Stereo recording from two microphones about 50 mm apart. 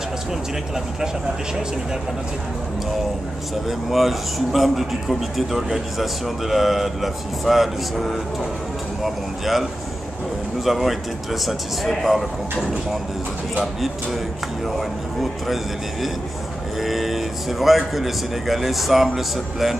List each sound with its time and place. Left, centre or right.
3.6 s speech: centre
15.4 s speech: centre